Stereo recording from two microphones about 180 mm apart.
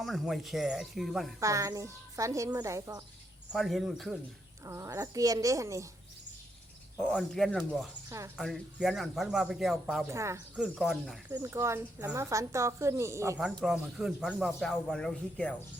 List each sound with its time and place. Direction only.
0.0 s speech: centre (ahead or behind)
1.4 s speech: 15° right (ahead or behind)
3.5 s speech: centre (ahead or behind)
4.6 s speech: 15° right (ahead or behind)
6.9 s speech: 5° left (ahead or behind)
10.1 s speech: 15° right (ahead or behind)
10.6 s speech: centre (ahead or behind)
11.3 s speech: 15° right (ahead or behind)
13.7 s speech: 5° right (ahead or behind)